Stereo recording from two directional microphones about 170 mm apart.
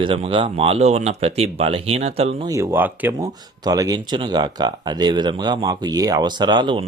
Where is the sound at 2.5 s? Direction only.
15° right (ahead or behind).